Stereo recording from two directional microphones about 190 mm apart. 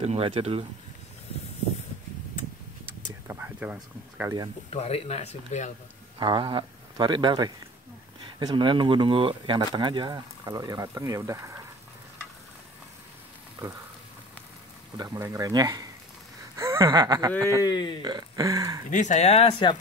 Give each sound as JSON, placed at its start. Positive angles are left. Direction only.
{"t": 0.0, "sound": "speech", "side_deg": -30}
{"t": 3.3, "sound": "speech", "side_deg": -10}
{"t": 4.7, "sound": "speech", "side_deg": 30}
{"t": 6.1, "sound": "speech", "side_deg": -25}
{"t": 15.0, "sound": "speech", "side_deg": -20}
{"t": 16.5, "sound": "a sound", "side_deg": -15}
{"t": 16.8, "sound": "speech", "side_deg": -25}
{"t": 17.6, "sound": "speech", "side_deg": 25}
{"t": 18.0, "sound": "speech", "side_deg": -20}
{"t": 18.9, "sound": "speech", "side_deg": 40}